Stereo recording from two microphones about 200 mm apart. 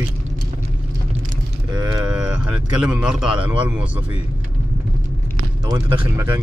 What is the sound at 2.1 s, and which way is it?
A man's voice, 5° right (ahead or behind).